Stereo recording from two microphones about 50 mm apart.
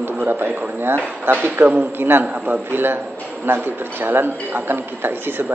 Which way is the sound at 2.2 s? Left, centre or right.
Right.